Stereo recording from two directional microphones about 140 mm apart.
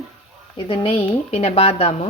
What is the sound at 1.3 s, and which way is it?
Speech, 45° left (ahead or behind).